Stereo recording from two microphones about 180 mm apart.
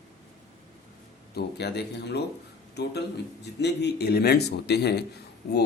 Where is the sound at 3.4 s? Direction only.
70° left (ahead or behind).